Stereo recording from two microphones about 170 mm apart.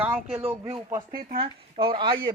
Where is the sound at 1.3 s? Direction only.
30° right (ahead or behind).